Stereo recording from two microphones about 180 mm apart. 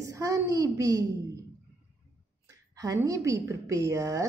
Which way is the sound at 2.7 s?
20° right (ahead or behind).